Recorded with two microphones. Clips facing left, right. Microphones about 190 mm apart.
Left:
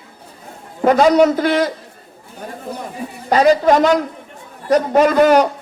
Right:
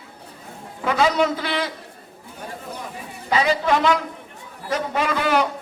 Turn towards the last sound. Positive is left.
turn(degrees=45)  # may be behind; listen again after turning